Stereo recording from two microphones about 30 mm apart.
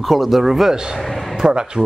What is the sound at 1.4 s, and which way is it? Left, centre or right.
Speech, right.